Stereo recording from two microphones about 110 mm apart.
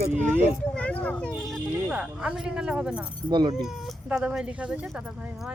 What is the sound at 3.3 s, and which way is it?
Speech, 40° right (ahead or behind).